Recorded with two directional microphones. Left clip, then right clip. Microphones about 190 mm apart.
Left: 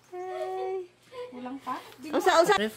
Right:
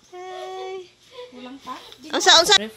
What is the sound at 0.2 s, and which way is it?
Child singing, centre (ahead or behind).